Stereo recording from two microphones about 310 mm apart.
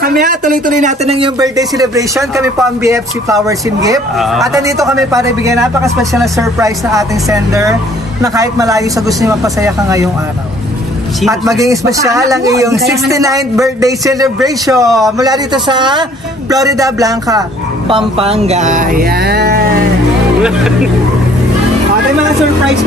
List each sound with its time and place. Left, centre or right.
0.0 s a man's voice: right; by 10.0 s centre
11.4 s a man's voice: centre; by 19.6 s right
20.4 s speech: centre